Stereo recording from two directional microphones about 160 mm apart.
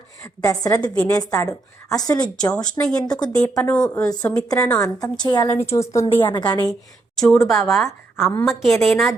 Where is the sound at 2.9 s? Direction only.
25° left (ahead or behind).